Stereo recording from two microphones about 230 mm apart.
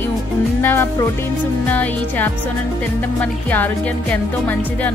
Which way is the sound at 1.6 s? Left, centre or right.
Centre.